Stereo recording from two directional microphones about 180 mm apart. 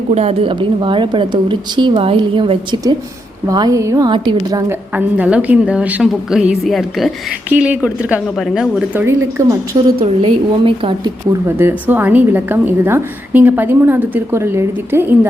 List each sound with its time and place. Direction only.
0.1 s speech: 35° right (ahead or behind)
4.5 s a woman's voice: 10° right (ahead or behind)
9.0 s a woman's voice: 15° right (ahead or behind)
10.0 s a woman's voice: 30° right (ahead or behind)
11.4 s a woman's voice: 10° right (ahead or behind)